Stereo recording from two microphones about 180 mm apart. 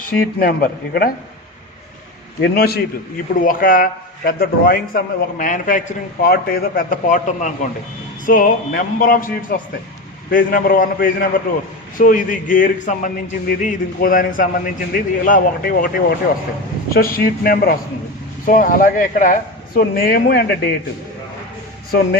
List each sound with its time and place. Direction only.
0.0 s a man's voice: 50° left (ahead or behind)
2.4 s a man's voice: 60° left (ahead or behind)